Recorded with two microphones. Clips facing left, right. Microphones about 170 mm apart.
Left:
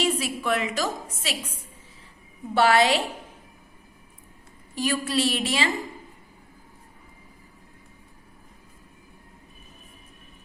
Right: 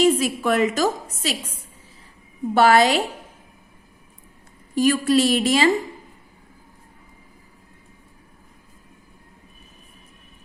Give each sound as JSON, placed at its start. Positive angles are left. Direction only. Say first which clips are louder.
{"t": 0.0, "sound": "a woman's voice", "louder": "right 8 dB", "side_deg": -45}
{"t": 2.6, "sound": "a woman's voice", "louder": "right 4 dB", "side_deg": -45}
{"t": 4.7, "sound": "a woman's voice", "louder": "right 8 dB", "side_deg": -45}